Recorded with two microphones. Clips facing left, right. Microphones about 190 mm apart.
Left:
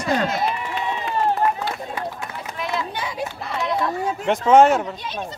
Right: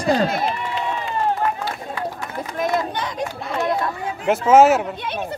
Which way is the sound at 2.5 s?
45° right (ahead or behind).